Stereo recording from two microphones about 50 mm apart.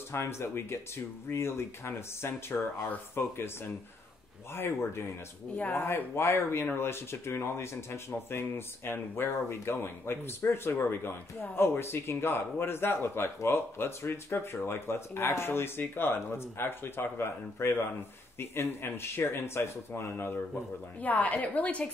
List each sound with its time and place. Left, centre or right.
0.1 s speech: left
2.5 s speech: left
21.0 s a woman's voice: left